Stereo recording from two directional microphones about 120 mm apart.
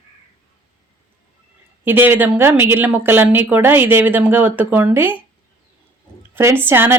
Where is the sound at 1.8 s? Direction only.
15° right (ahead or behind).